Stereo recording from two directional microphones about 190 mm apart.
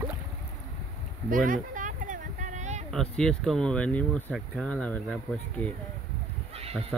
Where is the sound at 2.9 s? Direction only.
5° left (ahead or behind).